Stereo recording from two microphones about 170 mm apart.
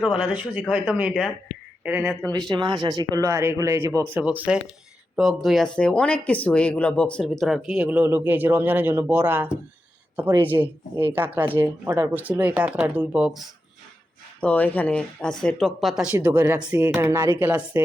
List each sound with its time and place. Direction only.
0.0 s speech: 5° right (ahead or behind)
2.3 s speech: 25° right (ahead or behind); by 13.4 s 5° right (ahead or behind)
14.4 s speech: 10° left (ahead or behind); by 17.8 s 10° right (ahead or behind)